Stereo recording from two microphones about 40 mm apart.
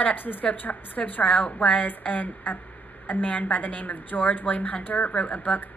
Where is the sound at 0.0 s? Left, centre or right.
Left.